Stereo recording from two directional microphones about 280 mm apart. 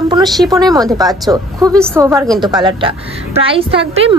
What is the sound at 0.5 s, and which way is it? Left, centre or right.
A woman's voice, centre.